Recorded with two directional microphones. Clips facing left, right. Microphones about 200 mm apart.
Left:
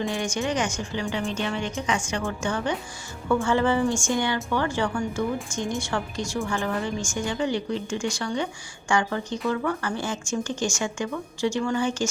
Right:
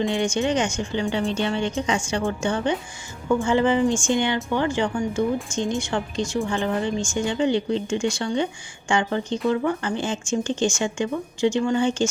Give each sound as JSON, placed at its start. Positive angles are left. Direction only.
{"t": 0.0, "sound": "a woman's voice", "side_deg": -20}